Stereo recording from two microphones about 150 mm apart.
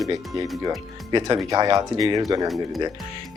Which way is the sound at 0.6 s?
30° right (ahead or behind).